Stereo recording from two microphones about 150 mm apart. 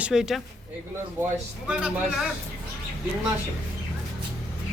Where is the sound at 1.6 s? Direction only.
5° right (ahead or behind).